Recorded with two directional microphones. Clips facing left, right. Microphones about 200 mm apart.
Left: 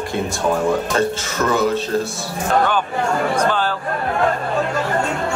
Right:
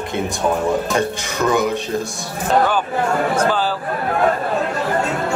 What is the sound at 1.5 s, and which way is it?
Speech, 15° right (ahead or behind).